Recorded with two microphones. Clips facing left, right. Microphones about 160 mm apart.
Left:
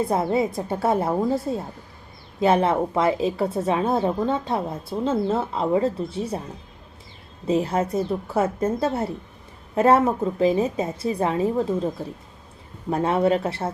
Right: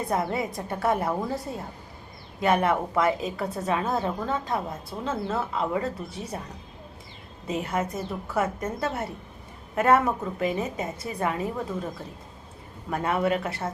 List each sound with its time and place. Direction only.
0.1 s a woman's voice: 25° left (ahead or behind)
7.4 s a woman's voice: 30° left (ahead or behind)
12.9 s a woman's voice: 30° left (ahead or behind)